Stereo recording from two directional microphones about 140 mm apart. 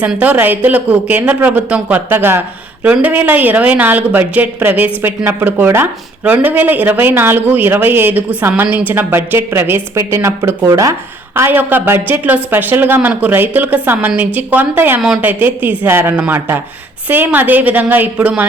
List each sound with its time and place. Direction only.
0.0 s speech: 10° right (ahead or behind)